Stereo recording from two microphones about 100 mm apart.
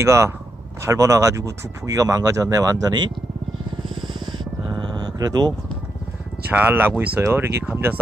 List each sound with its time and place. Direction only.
0.0 s speech: 30° right (ahead or behind)
3.9 s a sound: 50° right (ahead or behind)
6.5 s speech: 20° right (ahead or behind)